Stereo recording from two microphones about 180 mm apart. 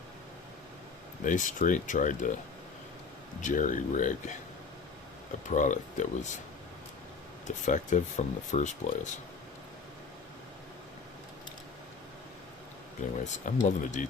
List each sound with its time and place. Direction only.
1.2 s speech: 45° left (ahead or behind)
3.4 s speech: 45° left (ahead or behind)
5.5 s speech: 45° left (ahead or behind)
7.4 s speech: 45° left (ahead or behind)
13.1 s speech: 40° left (ahead or behind)